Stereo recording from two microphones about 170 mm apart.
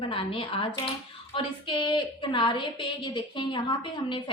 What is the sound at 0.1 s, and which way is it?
A woman's voice, 30° left (ahead or behind).